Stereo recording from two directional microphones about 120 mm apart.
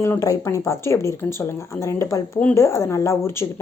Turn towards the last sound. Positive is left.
turn(degrees=25)  # may be behind; listen again after turning